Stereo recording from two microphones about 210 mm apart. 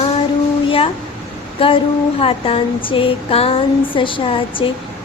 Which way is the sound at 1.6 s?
25° left (ahead or behind).